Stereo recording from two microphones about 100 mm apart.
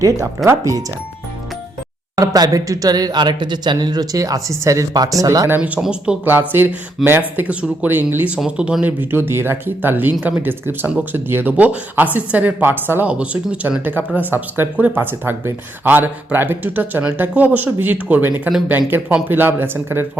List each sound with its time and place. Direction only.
0.4 s speech: 35° right (ahead or behind)
2.1 s speech: 40° right (ahead or behind)
5.5 s speech: 15° right (ahead or behind)
6.5 s speech: 20° right (ahead or behind)